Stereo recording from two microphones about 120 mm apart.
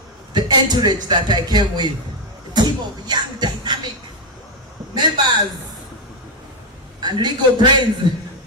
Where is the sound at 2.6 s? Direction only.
40° right (ahead or behind).